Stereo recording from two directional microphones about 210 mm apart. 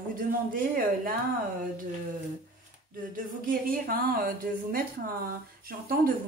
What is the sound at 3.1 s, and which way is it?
A woman's voice, 40° right (ahead or behind).